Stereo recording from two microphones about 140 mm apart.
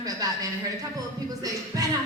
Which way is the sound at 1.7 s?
25° right (ahead or behind).